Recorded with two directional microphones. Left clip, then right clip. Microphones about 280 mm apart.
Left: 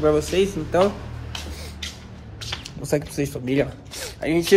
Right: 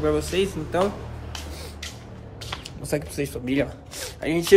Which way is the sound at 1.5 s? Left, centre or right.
Centre.